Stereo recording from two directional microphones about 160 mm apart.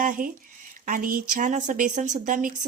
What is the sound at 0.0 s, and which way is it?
Speech, 55° right (ahead or behind).